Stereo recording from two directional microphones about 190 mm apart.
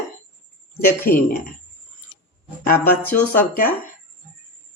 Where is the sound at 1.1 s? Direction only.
50° left (ahead or behind).